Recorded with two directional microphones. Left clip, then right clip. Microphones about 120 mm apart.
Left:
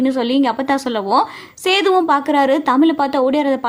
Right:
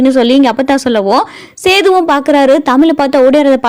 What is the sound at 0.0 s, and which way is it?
A woman's voice, 65° right (ahead or behind).